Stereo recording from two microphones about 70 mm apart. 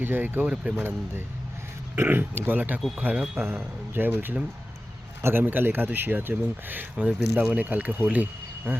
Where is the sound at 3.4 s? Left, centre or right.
Right.